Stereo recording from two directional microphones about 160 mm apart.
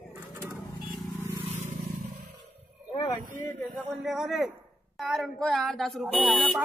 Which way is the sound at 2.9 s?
35° left (ahead or behind).